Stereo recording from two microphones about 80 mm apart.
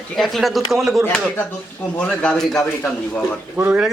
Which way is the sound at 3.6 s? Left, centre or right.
Right.